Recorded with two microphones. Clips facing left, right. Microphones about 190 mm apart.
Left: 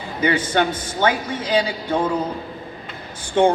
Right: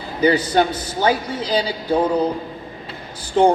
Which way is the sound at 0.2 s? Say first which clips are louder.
Right 3 dB; 40° right (ahead or behind).